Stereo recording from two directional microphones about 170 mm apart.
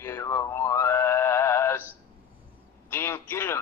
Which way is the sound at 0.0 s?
15° left (ahead or behind).